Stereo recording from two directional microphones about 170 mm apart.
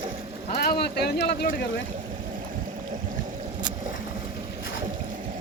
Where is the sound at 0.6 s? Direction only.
70° left (ahead or behind).